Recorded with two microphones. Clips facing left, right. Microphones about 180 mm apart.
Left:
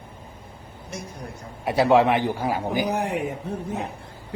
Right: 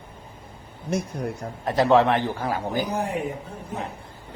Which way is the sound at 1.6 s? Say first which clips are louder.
Left 1 dB; 10° left (ahead or behind).